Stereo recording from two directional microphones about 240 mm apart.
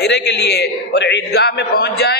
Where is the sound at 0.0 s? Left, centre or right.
Left.